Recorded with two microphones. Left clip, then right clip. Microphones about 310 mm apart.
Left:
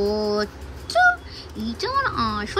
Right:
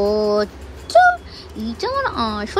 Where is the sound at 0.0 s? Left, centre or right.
Centre.